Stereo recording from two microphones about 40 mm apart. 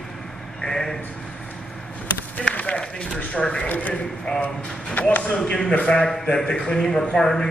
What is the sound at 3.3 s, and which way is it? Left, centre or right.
Speech, left.